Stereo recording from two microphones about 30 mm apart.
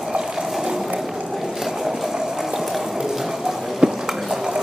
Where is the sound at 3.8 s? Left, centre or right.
Right.